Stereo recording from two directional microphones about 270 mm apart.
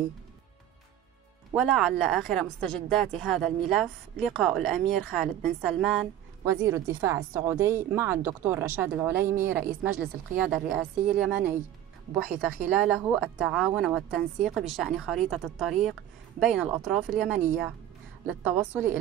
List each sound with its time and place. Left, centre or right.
1.5 s a woman's voice: centre